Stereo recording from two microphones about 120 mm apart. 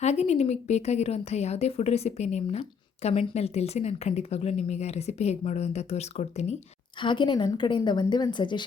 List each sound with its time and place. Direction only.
0.0 s speech: 65° left (ahead or behind)
7.0 s a woman's voice: 40° left (ahead or behind)